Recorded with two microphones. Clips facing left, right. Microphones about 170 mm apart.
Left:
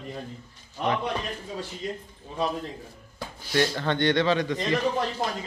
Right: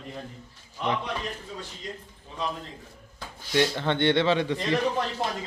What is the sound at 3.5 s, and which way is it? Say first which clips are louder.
A man's voice: even; 20° right (ahead or behind).